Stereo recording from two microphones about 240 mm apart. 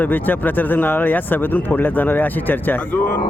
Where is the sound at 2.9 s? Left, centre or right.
Left.